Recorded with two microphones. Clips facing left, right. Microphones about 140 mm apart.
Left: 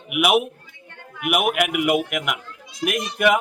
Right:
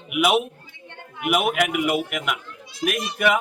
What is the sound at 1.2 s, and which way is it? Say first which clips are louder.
A man's voice: even; 10° left (ahead or behind).